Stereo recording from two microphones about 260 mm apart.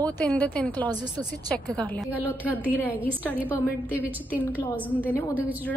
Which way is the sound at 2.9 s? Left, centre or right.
Centre.